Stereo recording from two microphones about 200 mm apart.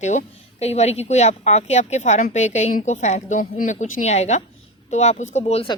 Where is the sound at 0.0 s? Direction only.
35° left (ahead or behind).